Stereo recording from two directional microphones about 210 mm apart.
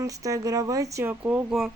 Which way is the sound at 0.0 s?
15° right (ahead or behind).